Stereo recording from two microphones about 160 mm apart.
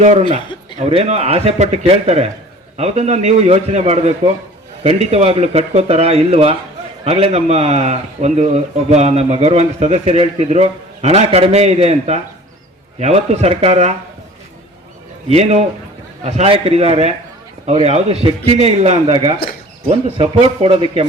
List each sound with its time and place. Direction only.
0.0 s a man's voice: 45° right (ahead or behind)
15.3 s speech: 40° right (ahead or behind)